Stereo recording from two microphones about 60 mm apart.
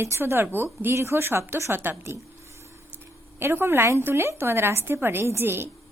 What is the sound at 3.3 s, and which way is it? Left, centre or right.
Speech, right.